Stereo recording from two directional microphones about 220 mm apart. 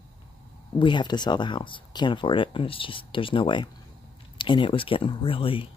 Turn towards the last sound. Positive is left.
turn(degrees=25)  # may be behind; listen again after turning